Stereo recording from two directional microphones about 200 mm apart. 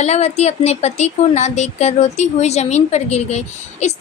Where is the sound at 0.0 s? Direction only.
35° left (ahead or behind).